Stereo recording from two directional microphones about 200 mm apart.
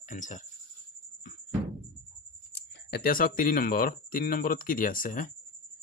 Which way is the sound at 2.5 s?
50° left (ahead or behind).